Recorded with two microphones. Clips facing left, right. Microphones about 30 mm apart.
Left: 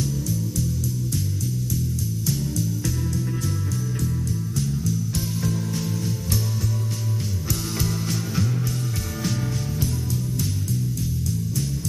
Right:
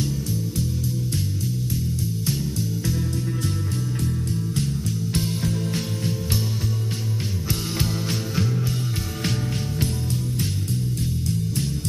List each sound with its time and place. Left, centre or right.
0.0 s music: right
4.6 s music: right
7.4 s music: right